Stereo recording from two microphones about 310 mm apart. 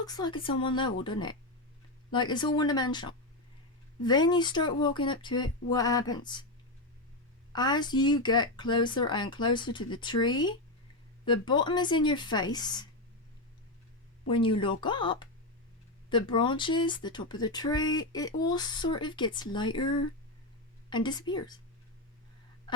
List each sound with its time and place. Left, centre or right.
0.0 s speech: centre
7.5 s speech: centre
14.3 s speech: centre